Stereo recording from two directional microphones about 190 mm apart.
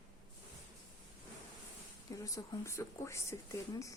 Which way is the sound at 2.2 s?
15° left (ahead or behind).